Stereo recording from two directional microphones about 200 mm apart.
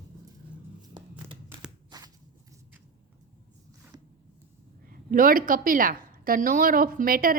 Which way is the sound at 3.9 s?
20° right (ahead or behind).